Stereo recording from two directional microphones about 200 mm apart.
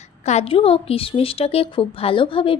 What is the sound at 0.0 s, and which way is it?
A woman's voice, 35° left (ahead or behind).